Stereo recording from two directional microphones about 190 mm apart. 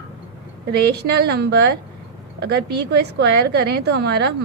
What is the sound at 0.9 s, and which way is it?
A woman's voice, 60° right (ahead or behind).